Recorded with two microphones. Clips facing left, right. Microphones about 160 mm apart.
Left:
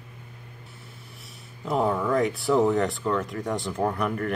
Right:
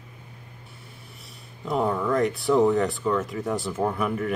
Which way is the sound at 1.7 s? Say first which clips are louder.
Even; centre (ahead or behind).